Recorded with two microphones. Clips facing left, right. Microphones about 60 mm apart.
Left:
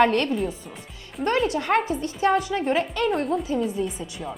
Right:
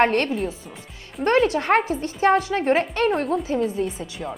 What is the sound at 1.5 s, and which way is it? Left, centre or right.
Speech, right.